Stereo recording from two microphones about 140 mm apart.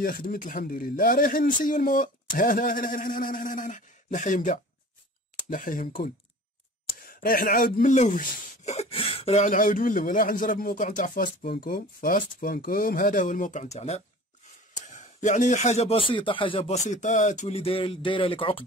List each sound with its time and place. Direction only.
0.0 s speech: 90° left; by 4.6 s 60° left (ahead or behind)
5.5 s speech: 75° left (ahead or behind)
7.0 s speech: 90° left; by 8.8 s 65° left (ahead or behind)
8.9 s speech: 40° left (ahead or behind)
14.9 s speech: 60° left (ahead or behind); by 16.7 s 40° left (ahead or behind)
16.7 s speech: 55° left (ahead or behind); by 18.6 s 40° left (ahead or behind)